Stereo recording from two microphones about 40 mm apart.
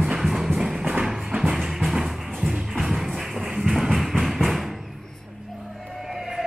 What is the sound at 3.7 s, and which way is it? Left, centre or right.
Music, centre.